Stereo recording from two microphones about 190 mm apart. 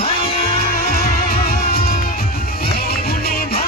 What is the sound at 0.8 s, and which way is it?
Music, 55° left (ahead or behind).